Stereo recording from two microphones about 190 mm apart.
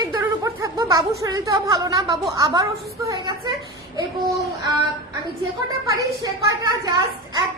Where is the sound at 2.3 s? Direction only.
20° right (ahead or behind).